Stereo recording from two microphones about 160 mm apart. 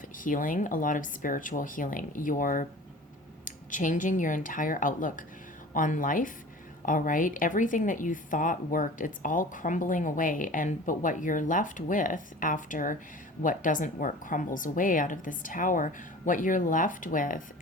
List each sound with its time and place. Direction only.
0.2 s a woman's voice: 55° left (ahead or behind)